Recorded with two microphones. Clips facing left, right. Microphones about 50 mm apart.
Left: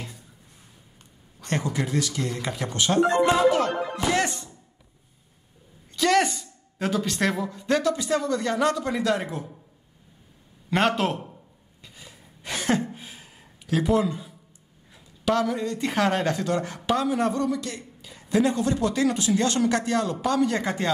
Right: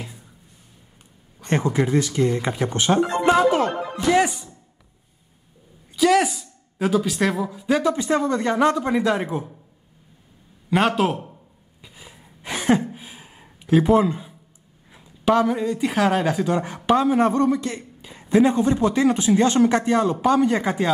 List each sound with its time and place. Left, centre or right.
1.4 s speech: right
4.1 s speech: centre
5.9 s speech: centre
7.8 s speech: right
10.7 s speech: centre
11.8 s a sound: centre
15.8 s speech: centre
16.5 s speech: right
20.6 s speech: centre